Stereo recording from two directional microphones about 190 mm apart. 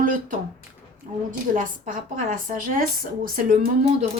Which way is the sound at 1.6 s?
45° right (ahead or behind).